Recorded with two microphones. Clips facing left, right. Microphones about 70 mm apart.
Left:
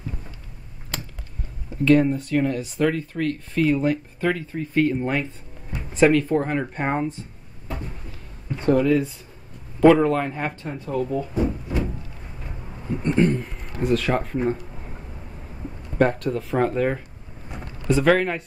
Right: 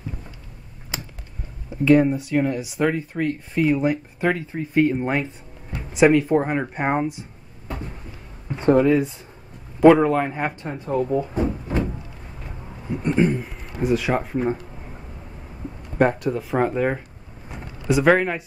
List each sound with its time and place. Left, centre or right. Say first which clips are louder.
0.9 s a sound: even; centre
1.9 s speech: right 1 dB; centre
8.5 s speech: right 2 dB; right
9.8 s speech: right 2 dB; centre; by 11.8 s right
12.9 s a sound: even; centre
13.2 s speech: even; centre
16.0 s speech: right 1 dB; centre